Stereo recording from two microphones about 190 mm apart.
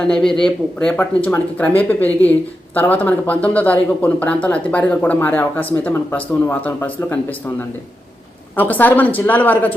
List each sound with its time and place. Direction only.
0.0 s speech: 5° left (ahead or behind)
8.5 s speech: 10° left (ahead or behind)